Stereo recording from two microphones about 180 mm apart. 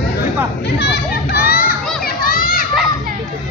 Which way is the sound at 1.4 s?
55° left (ahead or behind).